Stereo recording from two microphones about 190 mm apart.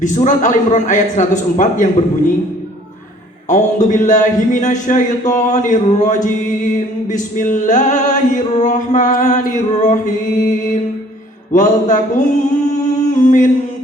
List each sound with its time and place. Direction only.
0.0 s a man's voice: 40° left (ahead or behind)
3.5 s a man's voice: 40° left (ahead or behind)
12.4 s singing: 40° left (ahead or behind)